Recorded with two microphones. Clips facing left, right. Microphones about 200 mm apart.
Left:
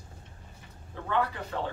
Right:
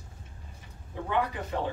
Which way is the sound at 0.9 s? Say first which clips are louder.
Even; 15° right (ahead or behind).